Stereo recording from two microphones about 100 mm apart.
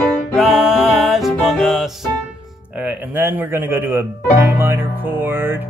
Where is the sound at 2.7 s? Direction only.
15° right (ahead or behind).